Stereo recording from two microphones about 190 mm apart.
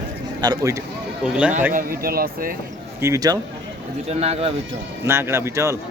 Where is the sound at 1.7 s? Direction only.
50° right (ahead or behind).